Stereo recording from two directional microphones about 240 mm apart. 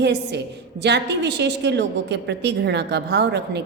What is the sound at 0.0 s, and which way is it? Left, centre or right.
A woman's voice, right.